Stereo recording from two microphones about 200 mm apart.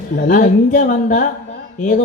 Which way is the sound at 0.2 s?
40° left (ahead or behind).